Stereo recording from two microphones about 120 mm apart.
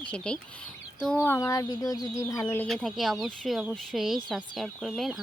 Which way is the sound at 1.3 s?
25° left (ahead or behind).